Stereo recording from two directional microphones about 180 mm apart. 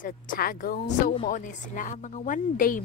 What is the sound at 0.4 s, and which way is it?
A woman's voice, 50° left (ahead or behind).